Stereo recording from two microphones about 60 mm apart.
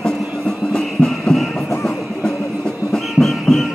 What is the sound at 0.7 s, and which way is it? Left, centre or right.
Music, centre.